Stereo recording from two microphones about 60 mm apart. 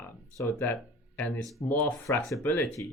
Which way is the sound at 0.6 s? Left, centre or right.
Left.